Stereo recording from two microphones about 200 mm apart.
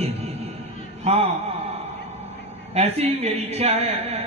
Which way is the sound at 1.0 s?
30° right (ahead or behind).